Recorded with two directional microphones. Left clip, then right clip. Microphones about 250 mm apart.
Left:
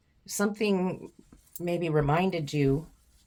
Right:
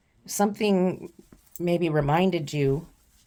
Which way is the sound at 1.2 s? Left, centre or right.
Right.